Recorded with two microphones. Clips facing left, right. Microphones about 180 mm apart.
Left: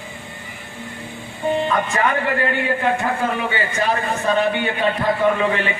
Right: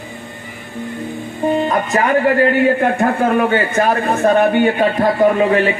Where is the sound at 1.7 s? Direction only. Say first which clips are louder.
Right 5 dB; 40° right (ahead or behind).